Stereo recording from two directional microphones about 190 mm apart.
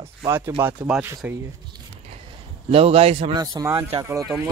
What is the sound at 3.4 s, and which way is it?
Music, 20° right (ahead or behind).